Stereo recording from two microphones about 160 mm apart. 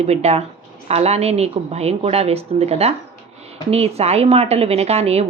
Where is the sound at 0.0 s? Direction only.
40° right (ahead or behind).